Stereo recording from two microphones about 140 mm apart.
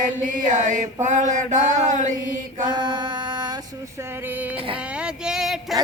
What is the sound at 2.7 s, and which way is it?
Mantra, 30° right (ahead or behind).